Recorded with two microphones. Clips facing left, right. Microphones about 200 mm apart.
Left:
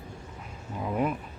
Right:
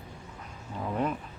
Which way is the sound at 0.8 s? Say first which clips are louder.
Left 2 dB; 5° left (ahead or behind).